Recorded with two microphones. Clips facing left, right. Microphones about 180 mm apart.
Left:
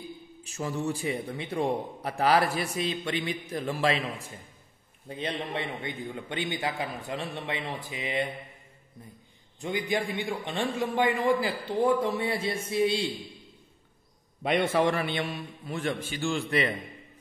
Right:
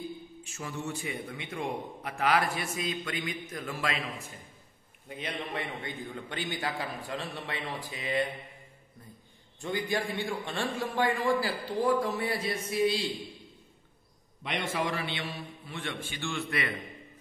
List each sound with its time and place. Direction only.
0.4 s a man's voice: 35° left (ahead or behind); by 8.3 s 20° left (ahead or behind)
9.6 s a man's voice: 15° left (ahead or behind)
14.6 s a man's voice: 55° left (ahead or behind); by 16.6 s 35° left (ahead or behind)